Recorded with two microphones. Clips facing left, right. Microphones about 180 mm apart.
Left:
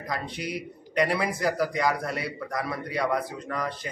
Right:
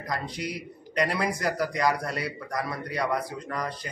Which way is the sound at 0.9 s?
Centre (ahead or behind).